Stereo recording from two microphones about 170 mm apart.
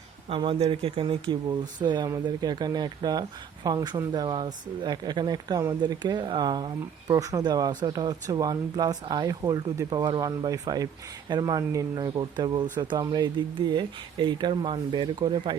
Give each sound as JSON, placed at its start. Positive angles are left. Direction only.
{"t": 0.3, "sound": "speech", "side_deg": -30}